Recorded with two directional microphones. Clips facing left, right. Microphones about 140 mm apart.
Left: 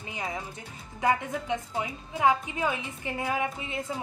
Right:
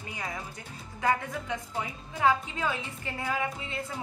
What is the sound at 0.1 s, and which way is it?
A woman's voice, 25° left (ahead or behind).